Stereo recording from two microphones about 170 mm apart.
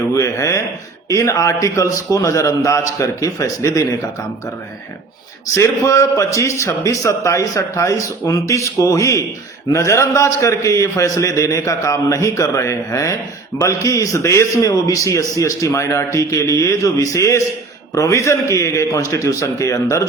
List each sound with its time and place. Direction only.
0.1 s a man's voice: 20° left (ahead or behind)
5.5 s a man's voice: 15° left (ahead or behind)